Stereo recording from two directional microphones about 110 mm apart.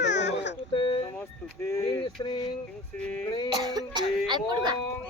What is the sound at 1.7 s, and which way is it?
Speech, 30° left (ahead or behind).